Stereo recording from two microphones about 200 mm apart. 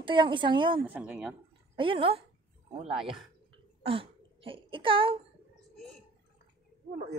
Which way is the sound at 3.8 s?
25° right (ahead or behind).